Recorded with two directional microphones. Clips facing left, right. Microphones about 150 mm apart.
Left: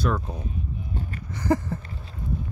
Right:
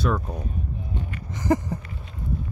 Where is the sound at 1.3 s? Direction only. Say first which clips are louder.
Right 1 dB; 20° right (ahead or behind).